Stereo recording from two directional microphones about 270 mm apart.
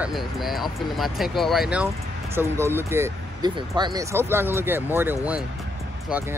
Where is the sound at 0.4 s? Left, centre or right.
Centre.